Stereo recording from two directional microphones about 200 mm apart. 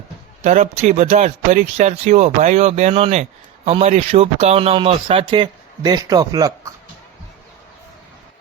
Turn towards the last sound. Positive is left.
turn(degrees=-15)  # may be behind; listen again after turning